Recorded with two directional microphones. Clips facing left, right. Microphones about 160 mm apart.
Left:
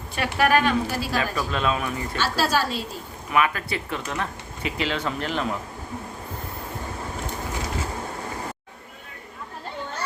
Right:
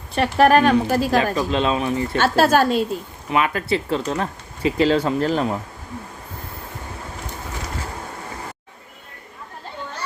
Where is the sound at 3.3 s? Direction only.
30° right (ahead or behind).